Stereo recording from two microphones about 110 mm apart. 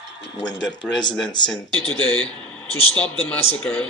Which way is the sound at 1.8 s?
50° right (ahead or behind).